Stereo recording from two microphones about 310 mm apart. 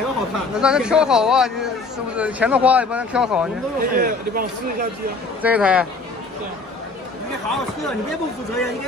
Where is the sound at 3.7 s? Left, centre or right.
Right.